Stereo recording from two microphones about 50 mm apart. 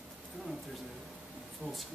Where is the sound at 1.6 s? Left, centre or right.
Right.